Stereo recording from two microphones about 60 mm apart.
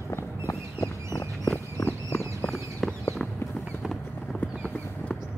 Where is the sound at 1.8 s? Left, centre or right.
Left.